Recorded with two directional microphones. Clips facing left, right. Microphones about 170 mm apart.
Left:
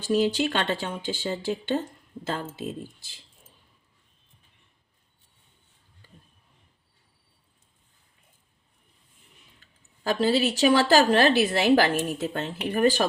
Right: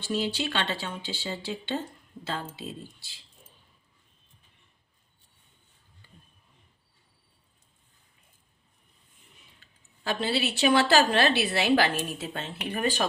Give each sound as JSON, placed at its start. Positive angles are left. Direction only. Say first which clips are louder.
{"t": 0.1, "sound": "a woman's voice", "louder": "left 6 dB", "side_deg": 45}
{"t": 10.0, "sound": "a woman's voice", "louder": "left 6 dB", "side_deg": 40}